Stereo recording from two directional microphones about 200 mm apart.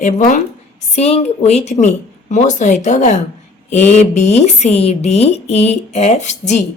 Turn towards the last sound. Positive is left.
turn(degrees=35)  # may be behind; listen again after turning